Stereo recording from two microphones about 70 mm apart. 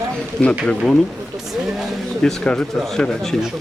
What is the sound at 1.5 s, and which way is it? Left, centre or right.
Speech, centre.